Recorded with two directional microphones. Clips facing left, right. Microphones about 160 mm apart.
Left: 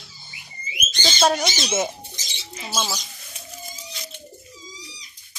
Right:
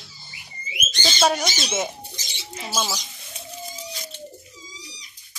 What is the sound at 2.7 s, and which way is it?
Bird, 5° right (ahead or behind).